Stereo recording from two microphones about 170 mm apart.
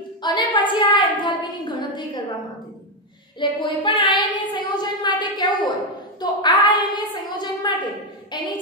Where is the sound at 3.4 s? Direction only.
30° left (ahead or behind).